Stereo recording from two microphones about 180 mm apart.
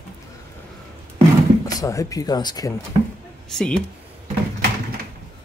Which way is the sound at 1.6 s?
20° left (ahead or behind).